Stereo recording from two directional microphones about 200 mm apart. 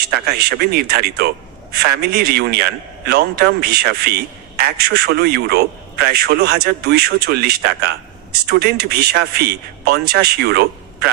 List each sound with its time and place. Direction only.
0.0 s a man's voice: 50° right (ahead or behind)